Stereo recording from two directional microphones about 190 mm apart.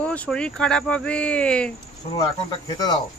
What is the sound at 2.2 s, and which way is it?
Speech, 20° left (ahead or behind).